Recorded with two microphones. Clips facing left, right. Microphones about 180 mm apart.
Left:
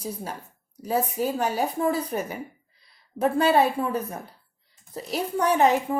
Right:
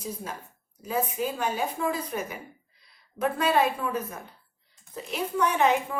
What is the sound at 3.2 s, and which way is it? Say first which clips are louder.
A woman's voice: left 4 dB; 30° left (ahead or behind).